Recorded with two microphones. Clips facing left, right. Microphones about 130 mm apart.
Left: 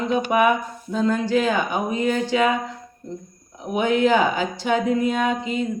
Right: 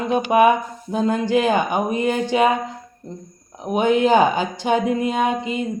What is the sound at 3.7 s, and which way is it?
Speech, 20° right (ahead or behind).